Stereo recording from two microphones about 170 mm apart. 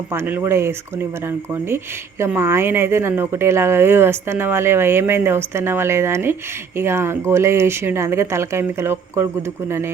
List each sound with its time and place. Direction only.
0.1 s speech: 15° right (ahead or behind)